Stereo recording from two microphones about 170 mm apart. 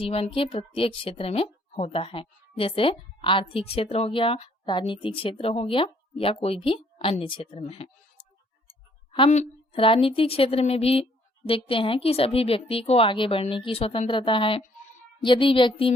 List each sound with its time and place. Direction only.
0.0 s a woman's voice: 35° left (ahead or behind)
9.3 s a woman's voice: 35° left (ahead or behind)